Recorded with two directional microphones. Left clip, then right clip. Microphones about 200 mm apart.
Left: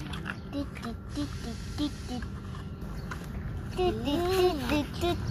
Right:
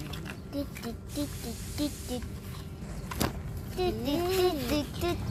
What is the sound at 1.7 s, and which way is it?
Hiss, 15° right (ahead or behind).